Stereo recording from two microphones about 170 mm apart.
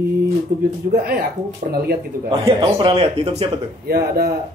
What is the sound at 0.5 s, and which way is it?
Speech, 60° right (ahead or behind).